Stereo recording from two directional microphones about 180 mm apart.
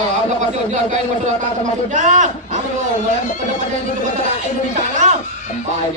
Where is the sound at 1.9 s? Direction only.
45° right (ahead or behind).